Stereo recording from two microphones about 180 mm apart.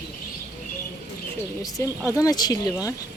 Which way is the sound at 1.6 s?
20° left (ahead or behind).